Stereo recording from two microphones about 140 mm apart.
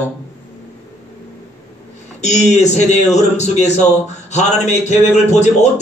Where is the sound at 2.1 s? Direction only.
55° left (ahead or behind).